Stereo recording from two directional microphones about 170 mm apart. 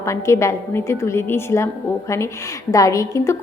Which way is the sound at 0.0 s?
15° left (ahead or behind).